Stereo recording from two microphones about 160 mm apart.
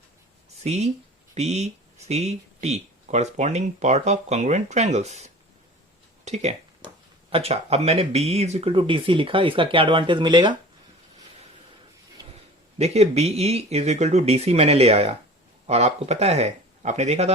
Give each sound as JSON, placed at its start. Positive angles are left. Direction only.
{"t": 0.6, "sound": "speech", "side_deg": -45}
{"t": 12.8, "sound": "speech", "side_deg": -40}